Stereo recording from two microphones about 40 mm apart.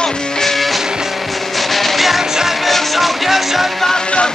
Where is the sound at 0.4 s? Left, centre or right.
Centre.